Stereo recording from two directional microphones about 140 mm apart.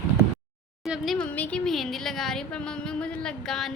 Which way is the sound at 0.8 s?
Centre (ahead or behind).